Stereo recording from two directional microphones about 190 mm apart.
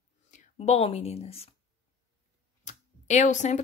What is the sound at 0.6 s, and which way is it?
Speech, 35° left (ahead or behind).